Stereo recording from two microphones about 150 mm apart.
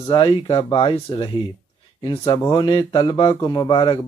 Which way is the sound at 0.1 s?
35° left (ahead or behind).